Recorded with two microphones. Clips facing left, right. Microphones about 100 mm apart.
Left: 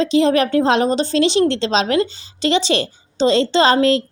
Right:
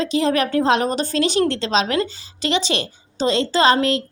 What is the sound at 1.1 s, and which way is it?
Speech, 45° right (ahead or behind).